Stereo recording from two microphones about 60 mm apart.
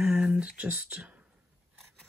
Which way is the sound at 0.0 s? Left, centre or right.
Centre.